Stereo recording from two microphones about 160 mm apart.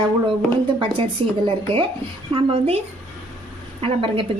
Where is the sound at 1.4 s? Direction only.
30° right (ahead or behind).